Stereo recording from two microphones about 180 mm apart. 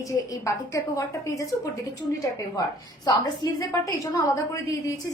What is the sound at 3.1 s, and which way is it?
A woman's voice, 20° left (ahead or behind).